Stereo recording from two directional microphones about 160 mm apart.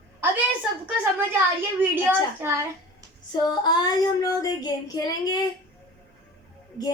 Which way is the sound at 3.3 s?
25° left (ahead or behind).